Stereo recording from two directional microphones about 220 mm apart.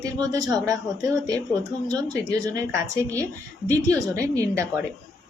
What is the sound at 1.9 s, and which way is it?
Speech, 15° right (ahead or behind).